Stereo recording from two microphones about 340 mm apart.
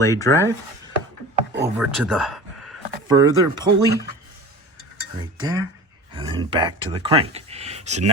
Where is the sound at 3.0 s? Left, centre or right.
Centre.